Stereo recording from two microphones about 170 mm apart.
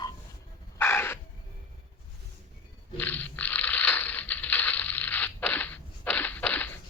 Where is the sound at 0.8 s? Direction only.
15° left (ahead or behind).